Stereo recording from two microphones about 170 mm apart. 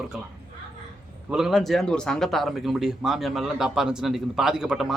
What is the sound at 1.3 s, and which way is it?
A man's voice, 5° right (ahead or behind).